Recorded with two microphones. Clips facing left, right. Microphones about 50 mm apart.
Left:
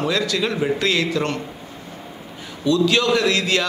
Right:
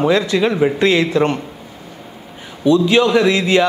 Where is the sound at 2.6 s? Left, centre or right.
Right.